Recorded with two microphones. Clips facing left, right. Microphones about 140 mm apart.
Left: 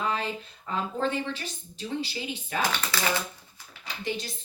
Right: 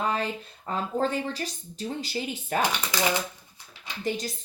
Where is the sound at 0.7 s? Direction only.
40° right (ahead or behind).